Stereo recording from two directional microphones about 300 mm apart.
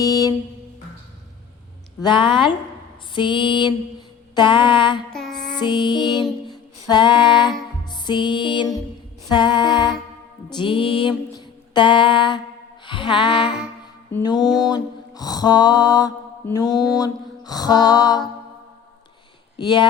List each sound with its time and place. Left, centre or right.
0.0 s a sound: centre
2.0 s music: centre
5.1 s music: centre
5.5 s female singing: centre
7.9 s music: centre
11.3 s a sound: centre
12.8 s music: centre
19.5 s music: centre